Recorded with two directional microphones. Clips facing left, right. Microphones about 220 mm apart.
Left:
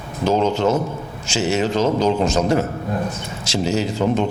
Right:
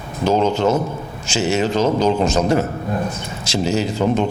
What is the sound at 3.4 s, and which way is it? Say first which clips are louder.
Speech: right 1 dB; 10° right (ahead or behind).